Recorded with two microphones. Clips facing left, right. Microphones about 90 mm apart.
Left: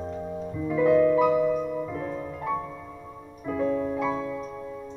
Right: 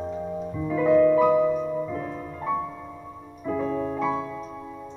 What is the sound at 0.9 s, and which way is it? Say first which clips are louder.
Music: right 2 dB; 30° right (ahead or behind).